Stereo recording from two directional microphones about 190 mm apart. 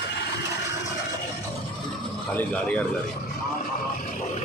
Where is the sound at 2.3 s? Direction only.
5° left (ahead or behind).